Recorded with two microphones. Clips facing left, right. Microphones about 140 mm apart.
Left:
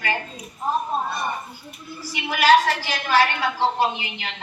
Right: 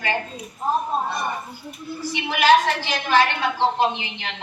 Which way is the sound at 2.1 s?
20° right (ahead or behind).